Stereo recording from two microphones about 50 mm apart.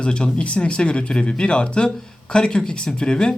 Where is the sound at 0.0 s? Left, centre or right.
Centre.